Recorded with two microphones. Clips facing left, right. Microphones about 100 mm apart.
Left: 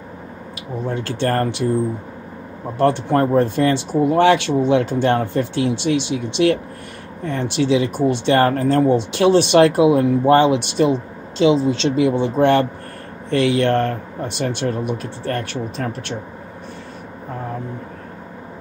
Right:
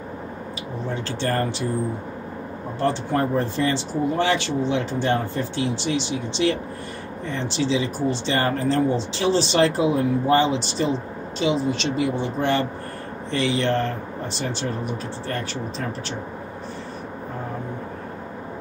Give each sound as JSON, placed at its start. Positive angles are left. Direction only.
{"t": 1.0, "sound": "speech", "side_deg": 55}
{"t": 2.8, "sound": "speech", "side_deg": 65}
{"t": 4.1, "sound": "speech", "side_deg": 75}
{"t": 7.2, "sound": "speech", "side_deg": 55}
{"t": 11.4, "sound": "speech", "side_deg": 90}